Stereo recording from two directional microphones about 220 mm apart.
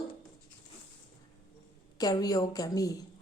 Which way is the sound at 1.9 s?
15° left (ahead or behind).